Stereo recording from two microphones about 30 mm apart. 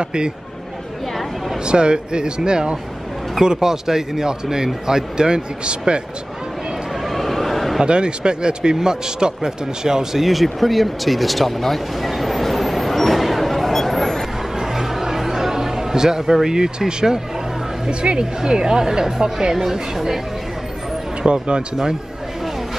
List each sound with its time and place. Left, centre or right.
0.0 s speech: right
1.7 s speech: right
3.5 s speech: centre; by 6.0 s right
7.1 s neigh: centre
7.8 s speech: right
10.1 s vehicle: centre
14.6 s a sound: centre
16.4 s speech: right
17.8 s speech: right; by 20.2 s centre
21.3 s speech: right